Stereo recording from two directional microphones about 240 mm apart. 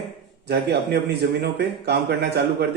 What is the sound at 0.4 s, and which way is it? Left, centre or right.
Speech, right.